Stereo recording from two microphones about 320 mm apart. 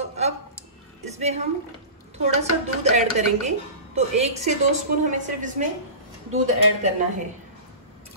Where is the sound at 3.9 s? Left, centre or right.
Centre.